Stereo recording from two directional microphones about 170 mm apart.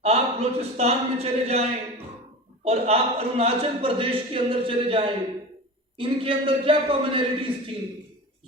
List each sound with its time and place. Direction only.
0.0 s a man's voice: 40° right (ahead or behind)
2.6 s a man's voice: 35° right (ahead or behind)